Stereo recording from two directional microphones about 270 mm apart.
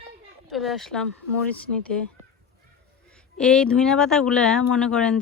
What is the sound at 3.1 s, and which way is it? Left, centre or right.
Speech, centre.